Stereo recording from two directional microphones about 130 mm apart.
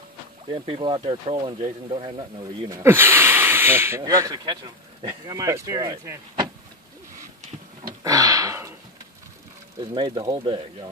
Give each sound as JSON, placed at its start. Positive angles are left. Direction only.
{"t": 0.5, "sound": "speech", "side_deg": -45}
{"t": 2.7, "sound": "speech", "side_deg": -20}
{"t": 4.0, "sound": "speech", "side_deg": -30}
{"t": 8.0, "sound": "a sound", "side_deg": -25}
{"t": 9.8, "sound": "speech", "side_deg": -35}